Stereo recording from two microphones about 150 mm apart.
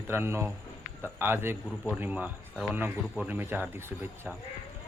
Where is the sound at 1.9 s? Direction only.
5° right (ahead or behind).